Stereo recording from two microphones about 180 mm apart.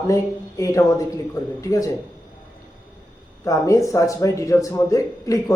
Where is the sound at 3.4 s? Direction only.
20° left (ahead or behind).